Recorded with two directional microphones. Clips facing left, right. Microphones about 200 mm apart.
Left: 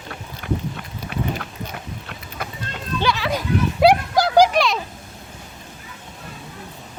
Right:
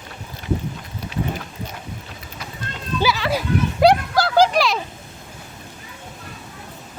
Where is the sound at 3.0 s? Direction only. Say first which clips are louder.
Right 1 dB; 5° right (ahead or behind).